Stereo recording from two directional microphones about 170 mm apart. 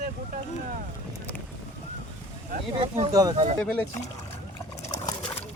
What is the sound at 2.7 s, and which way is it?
Speech, 35° right (ahead or behind).